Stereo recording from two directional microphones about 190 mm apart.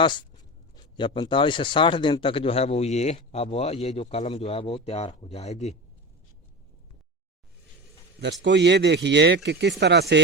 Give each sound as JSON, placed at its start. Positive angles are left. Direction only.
{"t": 0.0, "sound": "speech", "side_deg": 25}
{"t": 8.2, "sound": "speech", "side_deg": -65}